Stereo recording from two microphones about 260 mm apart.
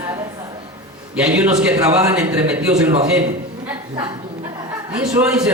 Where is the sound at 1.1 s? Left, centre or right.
Centre.